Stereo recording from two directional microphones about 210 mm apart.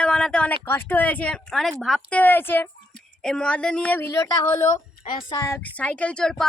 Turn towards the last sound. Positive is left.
turn(degrees=5)  # may be behind; listen again after turning